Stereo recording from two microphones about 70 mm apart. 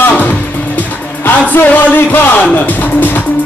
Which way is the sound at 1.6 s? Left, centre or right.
Left.